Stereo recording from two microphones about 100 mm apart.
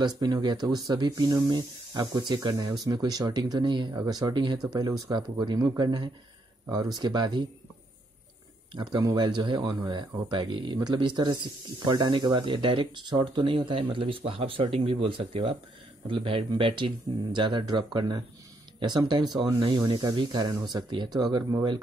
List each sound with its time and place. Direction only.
0.0 s speech: 45° right (ahead or behind)
3.9 s speech: 35° right (ahead or behind)
9.0 s speech: 45° right (ahead or behind)